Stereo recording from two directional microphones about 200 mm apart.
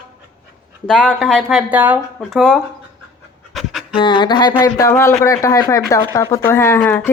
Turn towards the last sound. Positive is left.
turn(degrees=10)  # may be behind; listen again after turning